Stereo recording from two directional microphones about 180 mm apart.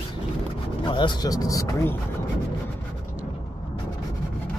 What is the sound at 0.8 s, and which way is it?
Speech, 25° left (ahead or behind).